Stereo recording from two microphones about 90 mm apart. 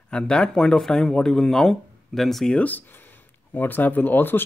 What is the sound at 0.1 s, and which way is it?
Speech, 10° left (ahead or behind).